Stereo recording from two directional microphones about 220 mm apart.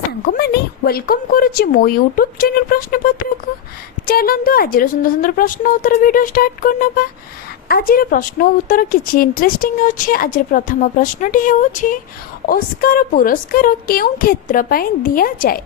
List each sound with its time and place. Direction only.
0.3 s a woman's voice: 45° left (ahead or behind)